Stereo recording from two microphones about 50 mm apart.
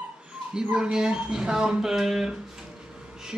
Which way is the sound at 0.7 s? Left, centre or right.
Centre.